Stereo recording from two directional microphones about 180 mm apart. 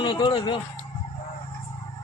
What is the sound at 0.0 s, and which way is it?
Speech, 25° left (ahead or behind).